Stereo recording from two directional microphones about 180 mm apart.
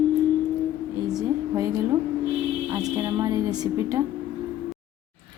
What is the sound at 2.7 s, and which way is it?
A woman's voice, 20° right (ahead or behind).